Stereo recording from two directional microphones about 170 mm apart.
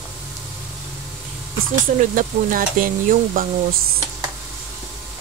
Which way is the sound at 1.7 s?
50° right (ahead or behind).